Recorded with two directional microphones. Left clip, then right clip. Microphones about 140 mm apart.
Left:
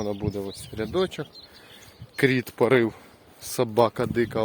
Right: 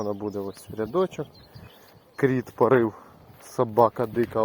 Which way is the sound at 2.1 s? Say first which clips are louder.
Left 2 dB; 50° left (ahead or behind).